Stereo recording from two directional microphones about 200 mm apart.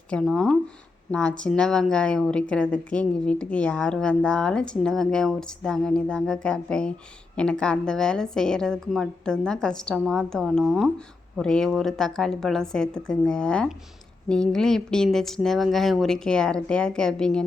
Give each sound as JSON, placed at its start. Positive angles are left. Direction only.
{"t": 0.1, "sound": "a woman's voice", "side_deg": 0}